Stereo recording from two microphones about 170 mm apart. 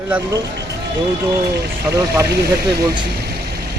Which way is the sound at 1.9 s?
30° right (ahead or behind).